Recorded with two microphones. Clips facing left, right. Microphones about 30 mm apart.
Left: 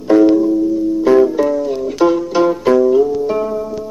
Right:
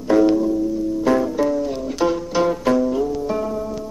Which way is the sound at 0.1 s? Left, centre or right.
Centre.